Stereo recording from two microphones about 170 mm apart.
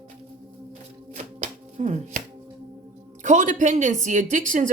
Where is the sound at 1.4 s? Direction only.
45° right (ahead or behind).